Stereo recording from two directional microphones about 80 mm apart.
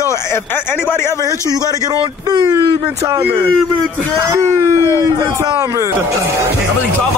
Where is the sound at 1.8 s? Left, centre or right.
Right.